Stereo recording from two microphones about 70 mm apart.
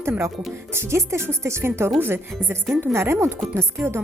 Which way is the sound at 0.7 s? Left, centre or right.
Right.